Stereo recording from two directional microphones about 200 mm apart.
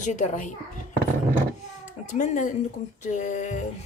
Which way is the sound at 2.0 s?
40° left (ahead or behind).